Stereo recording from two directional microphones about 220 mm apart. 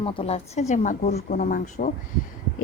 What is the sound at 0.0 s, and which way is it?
A woman's voice, 25° left (ahead or behind).